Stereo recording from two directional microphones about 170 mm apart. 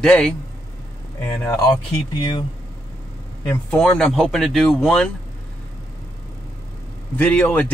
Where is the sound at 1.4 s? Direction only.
25° left (ahead or behind).